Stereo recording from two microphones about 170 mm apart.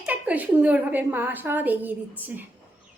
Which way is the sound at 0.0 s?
10° right (ahead or behind).